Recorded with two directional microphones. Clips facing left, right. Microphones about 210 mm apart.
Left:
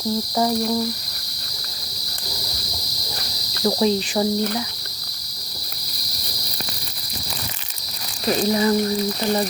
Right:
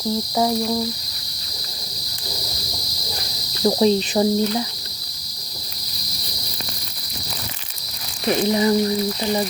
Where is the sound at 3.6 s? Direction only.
20° right (ahead or behind).